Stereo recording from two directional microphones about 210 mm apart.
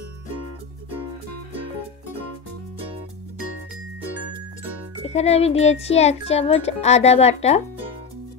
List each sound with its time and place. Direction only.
5.0 s a child's voice: 30° left (ahead or behind)